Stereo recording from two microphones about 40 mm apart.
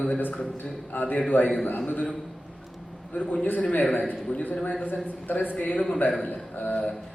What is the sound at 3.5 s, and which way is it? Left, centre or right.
A man's voice, left.